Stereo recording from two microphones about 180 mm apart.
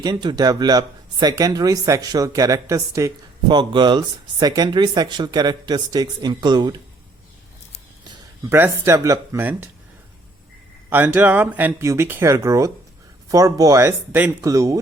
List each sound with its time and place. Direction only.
0.0 s speech: 25° right (ahead or behind)
8.1 s speech: 15° right (ahead or behind)
10.8 s speech: 10° right (ahead or behind)